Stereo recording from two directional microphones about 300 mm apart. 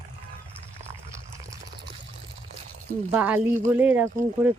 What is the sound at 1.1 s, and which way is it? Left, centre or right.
Fill, centre.